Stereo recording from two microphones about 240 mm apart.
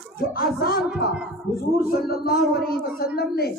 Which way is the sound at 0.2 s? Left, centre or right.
Left.